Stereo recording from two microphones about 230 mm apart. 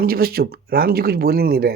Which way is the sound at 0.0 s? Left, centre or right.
Right.